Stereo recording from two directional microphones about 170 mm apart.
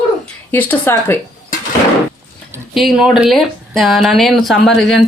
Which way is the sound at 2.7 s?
Centre (ahead or behind).